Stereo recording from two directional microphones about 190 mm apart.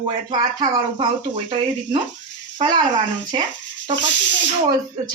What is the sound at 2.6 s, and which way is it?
Speech, 25° right (ahead or behind).